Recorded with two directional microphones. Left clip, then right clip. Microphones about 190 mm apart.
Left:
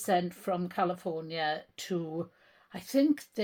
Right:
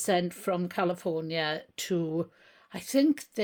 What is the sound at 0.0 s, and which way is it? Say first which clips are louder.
Speech: right 2 dB; 45° right (ahead or behind).